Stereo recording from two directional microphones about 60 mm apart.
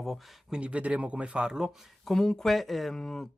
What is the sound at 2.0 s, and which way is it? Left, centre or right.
Speech, centre.